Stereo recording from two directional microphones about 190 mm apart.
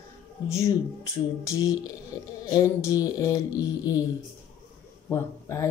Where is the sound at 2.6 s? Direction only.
15° left (ahead or behind).